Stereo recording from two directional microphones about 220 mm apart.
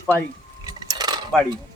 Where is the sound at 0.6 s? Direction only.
15° right (ahead or behind).